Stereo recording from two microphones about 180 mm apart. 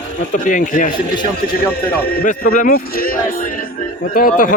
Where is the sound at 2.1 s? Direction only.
55° left (ahead or behind).